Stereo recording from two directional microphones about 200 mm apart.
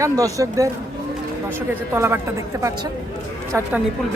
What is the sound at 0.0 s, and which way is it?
Speech, 15° right (ahead or behind).